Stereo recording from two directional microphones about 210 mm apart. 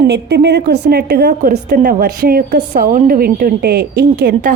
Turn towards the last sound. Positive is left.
turn(degrees=-45)  # may be behind; listen again after turning